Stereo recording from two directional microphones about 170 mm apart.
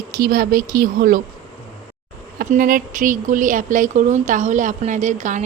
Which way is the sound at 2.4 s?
55° right (ahead or behind).